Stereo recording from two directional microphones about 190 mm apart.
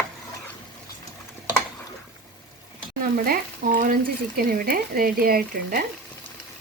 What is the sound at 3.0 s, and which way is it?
Speech, 50° right (ahead or behind).